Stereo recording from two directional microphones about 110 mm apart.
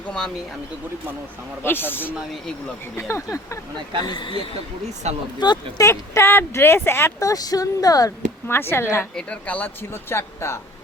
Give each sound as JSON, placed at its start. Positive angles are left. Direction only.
{"t": 1.6, "sound": "speech", "side_deg": 20}
{"t": 4.0, "sound": "speech", "side_deg": 45}
{"t": 5.0, "sound": "speech", "side_deg": -80}
{"t": 5.4, "sound": "speech", "side_deg": 40}
{"t": 5.8, "sound": "speech", "side_deg": 25}
{"t": 8.4, "sound": "speech", "side_deg": 20}
{"t": 9.1, "sound": "speech", "side_deg": 10}